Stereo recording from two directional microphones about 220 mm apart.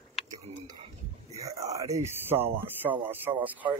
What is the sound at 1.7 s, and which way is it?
Speech, 15° right (ahead or behind).